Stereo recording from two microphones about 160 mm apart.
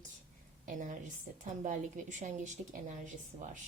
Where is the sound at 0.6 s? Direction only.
55° right (ahead or behind).